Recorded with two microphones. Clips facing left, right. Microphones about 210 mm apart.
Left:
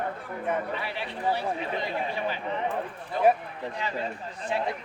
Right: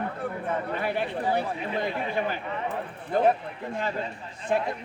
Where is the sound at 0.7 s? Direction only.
50° right (ahead or behind).